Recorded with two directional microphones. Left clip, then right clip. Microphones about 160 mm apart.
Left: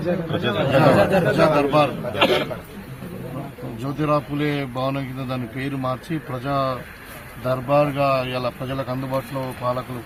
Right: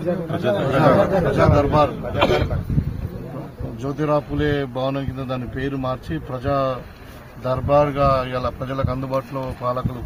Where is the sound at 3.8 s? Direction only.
10° right (ahead or behind).